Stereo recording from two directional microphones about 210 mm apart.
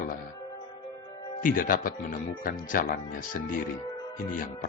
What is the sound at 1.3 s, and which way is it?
Speech, 40° left (ahead or behind).